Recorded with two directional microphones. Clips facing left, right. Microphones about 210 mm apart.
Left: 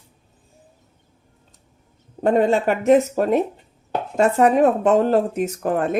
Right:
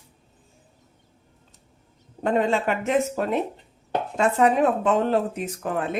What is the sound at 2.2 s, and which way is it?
A woman's voice, 40° left (ahead or behind).